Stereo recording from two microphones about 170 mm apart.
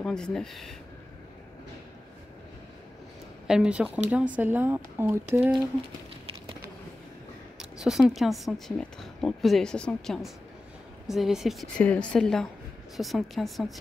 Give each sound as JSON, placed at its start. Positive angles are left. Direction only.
{"t": 0.0, "sound": "speech", "side_deg": 5}
{"t": 3.4, "sound": "speech", "side_deg": -5}
{"t": 7.5, "sound": "speech", "side_deg": -5}